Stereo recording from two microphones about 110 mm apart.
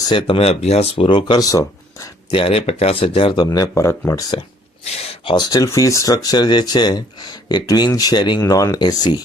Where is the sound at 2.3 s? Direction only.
55° left (ahead or behind).